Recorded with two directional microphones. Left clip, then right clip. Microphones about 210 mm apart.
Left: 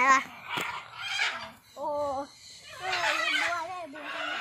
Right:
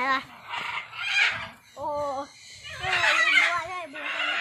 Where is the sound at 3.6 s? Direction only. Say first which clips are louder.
Right 3 dB; 5° right (ahead or behind).